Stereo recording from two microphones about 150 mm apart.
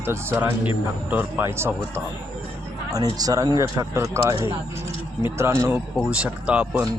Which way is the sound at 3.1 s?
25° right (ahead or behind).